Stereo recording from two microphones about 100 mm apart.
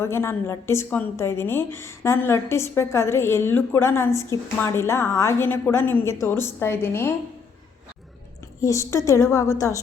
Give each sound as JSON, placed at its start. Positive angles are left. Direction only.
{"t": 0.0, "sound": "a woman's voice", "side_deg": 25}
{"t": 8.6, "sound": "a woman's voice", "side_deg": 30}